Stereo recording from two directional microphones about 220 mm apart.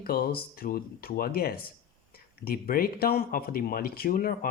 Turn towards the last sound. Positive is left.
turn(degrees=40)  # may be behind; listen again after turning